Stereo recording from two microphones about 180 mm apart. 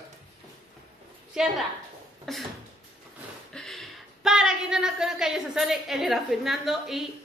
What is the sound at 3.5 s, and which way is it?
A woman's voice, centre (ahead or behind).